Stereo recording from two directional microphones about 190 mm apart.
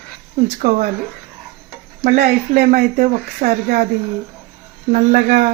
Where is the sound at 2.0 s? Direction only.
45° right (ahead or behind).